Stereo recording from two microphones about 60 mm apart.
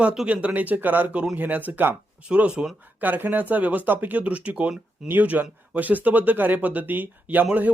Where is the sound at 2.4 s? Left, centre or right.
Centre.